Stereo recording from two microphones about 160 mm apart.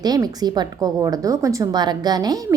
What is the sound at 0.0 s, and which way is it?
A woman's voice, 25° right (ahead or behind).